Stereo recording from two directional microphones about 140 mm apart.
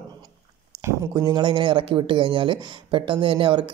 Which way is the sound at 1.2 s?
35° right (ahead or behind).